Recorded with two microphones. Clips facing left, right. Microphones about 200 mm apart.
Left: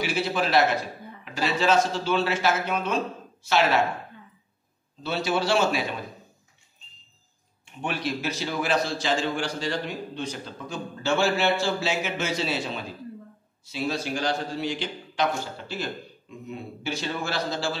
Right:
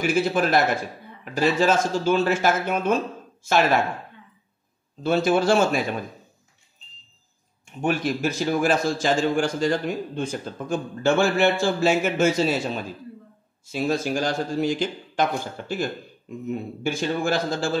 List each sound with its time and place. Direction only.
0.0 s a man's voice: 50° right (ahead or behind)
5.0 s a man's voice: 50° right (ahead or behind)
7.8 s a man's voice: 45° right (ahead or behind)
16.4 s a man's voice: 50° right (ahead or behind)